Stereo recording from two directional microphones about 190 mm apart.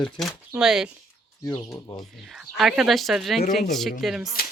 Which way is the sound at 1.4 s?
20° left (ahead or behind).